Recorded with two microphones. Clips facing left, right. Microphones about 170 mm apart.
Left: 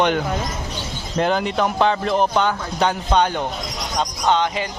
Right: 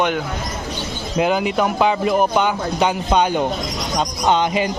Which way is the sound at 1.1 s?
5° right (ahead or behind).